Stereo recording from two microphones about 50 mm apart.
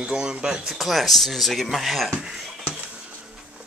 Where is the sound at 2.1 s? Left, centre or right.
Centre.